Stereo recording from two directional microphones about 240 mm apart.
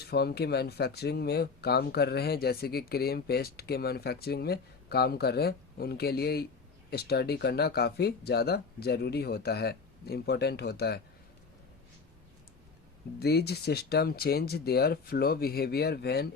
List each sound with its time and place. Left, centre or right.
0.0 s speech: left
13.1 s speech: left